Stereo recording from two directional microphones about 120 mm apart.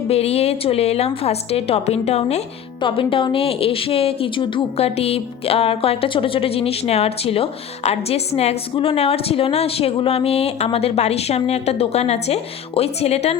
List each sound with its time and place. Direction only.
0.1 s a woman's voice: 60° left (ahead or behind)
2.8 s a woman's voice: 45° left (ahead or behind)